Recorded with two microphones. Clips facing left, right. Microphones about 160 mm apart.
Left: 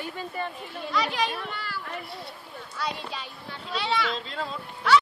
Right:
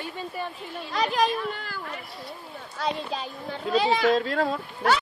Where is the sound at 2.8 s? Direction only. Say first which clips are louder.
Right 4 dB; 45° right (ahead or behind).